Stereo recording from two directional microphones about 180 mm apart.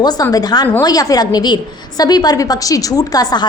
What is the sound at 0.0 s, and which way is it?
A woman's voice, 20° left (ahead or behind).